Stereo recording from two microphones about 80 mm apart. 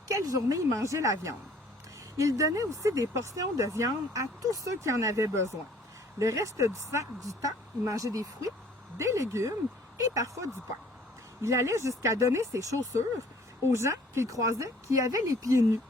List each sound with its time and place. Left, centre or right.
0.1 s speech: right
9.0 s speech: right